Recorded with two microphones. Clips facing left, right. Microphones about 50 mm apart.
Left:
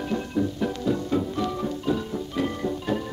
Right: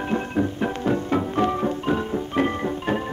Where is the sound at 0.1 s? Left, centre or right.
Right.